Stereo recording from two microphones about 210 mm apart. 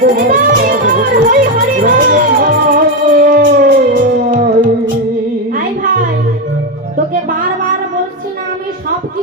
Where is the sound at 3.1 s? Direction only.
40° right (ahead or behind).